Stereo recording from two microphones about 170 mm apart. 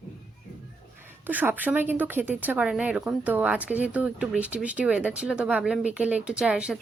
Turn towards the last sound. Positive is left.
turn(degrees=-5)  # may be behind; listen again after turning